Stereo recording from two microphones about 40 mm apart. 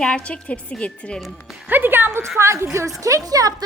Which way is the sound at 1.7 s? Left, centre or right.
Right.